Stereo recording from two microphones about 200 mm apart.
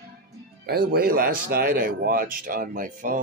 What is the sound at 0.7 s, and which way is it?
Speech, 50° right (ahead or behind).